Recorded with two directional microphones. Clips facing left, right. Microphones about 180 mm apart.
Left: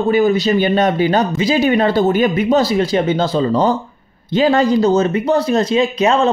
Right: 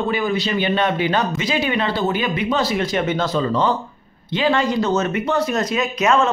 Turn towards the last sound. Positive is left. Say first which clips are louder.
# left 4 dB
turn(degrees=30)  # may be behind; listen again after turning